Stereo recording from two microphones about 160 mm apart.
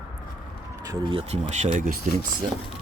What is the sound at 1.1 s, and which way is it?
Speech, 40° right (ahead or behind).